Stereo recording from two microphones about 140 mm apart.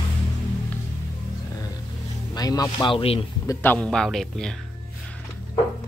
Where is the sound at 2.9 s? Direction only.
45° left (ahead or behind).